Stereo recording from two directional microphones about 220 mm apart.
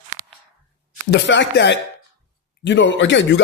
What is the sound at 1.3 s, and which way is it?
Speech, 55° left (ahead or behind).